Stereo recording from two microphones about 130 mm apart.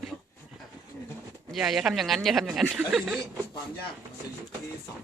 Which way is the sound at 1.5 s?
Centre (ahead or behind).